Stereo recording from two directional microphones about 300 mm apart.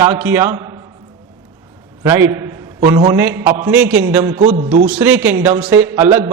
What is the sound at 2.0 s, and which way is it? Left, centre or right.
A man's voice, centre.